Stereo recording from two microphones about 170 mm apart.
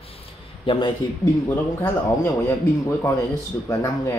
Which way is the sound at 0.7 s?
30° left (ahead or behind).